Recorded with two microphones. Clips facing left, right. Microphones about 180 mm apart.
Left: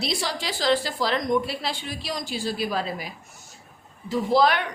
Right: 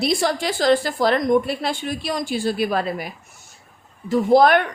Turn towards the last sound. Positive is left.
turn(degrees=-55)  # may be behind; listen again after turning